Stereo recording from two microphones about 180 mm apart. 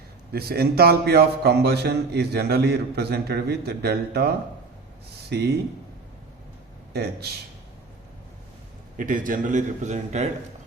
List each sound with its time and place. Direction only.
0.3 s speech: 60° right (ahead or behind)
5.3 s speech: 65° right (ahead or behind)
6.9 s speech: 65° right (ahead or behind)
9.0 s a man's voice: 50° right (ahead or behind)